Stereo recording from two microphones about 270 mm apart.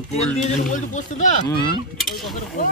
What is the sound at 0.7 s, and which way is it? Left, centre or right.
Speech, left.